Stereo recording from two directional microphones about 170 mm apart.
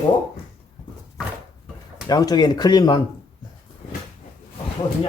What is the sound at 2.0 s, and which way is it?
Speech, 20° left (ahead or behind).